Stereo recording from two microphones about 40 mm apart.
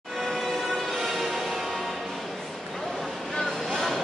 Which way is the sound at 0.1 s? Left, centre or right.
Centre.